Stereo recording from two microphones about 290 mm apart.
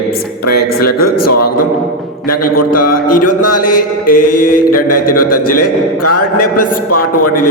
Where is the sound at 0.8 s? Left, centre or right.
Left.